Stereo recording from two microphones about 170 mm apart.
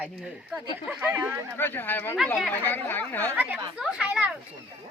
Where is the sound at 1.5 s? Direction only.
10° left (ahead or behind).